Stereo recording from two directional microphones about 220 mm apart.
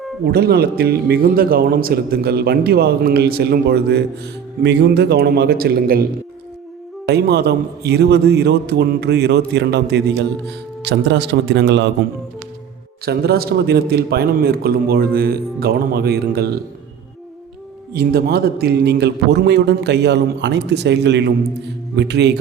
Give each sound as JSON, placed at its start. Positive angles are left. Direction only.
{"t": 0.3, "sound": "a man's voice", "side_deg": -45}
{"t": 7.1, "sound": "a man's voice", "side_deg": -50}
{"t": 13.1, "sound": "a man's voice", "side_deg": -45}
{"t": 17.9, "sound": "a man's voice", "side_deg": -45}